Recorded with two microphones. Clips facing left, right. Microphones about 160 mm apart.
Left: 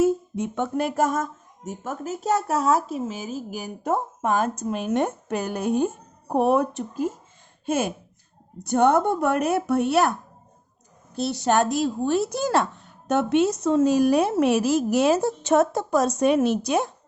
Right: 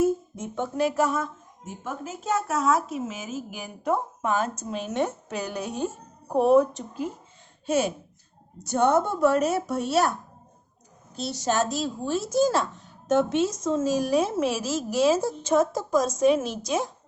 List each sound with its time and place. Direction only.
0.0 s speech: 70° left (ahead or behind)
7.6 s a woman's voice: 50° left (ahead or behind)